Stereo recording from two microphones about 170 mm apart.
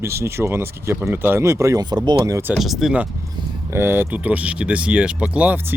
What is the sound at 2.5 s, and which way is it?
Speech, centre (ahead or behind).